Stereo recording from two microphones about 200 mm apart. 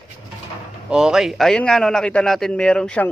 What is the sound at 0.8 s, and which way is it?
A man's voice, 5° right (ahead or behind).